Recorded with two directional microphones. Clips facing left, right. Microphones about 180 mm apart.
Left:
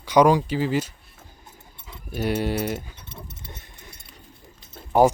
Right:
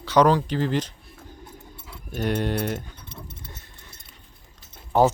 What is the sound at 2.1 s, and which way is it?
Speech, 10° left (ahead or behind).